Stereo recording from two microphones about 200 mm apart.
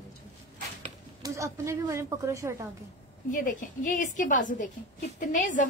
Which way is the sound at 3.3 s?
40° left (ahead or behind).